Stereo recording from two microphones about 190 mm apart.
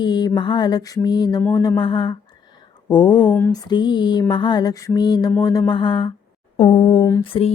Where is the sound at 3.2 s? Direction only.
10° left (ahead or behind).